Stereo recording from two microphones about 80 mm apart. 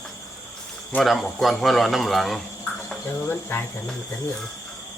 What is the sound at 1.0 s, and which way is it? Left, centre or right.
Speech, centre.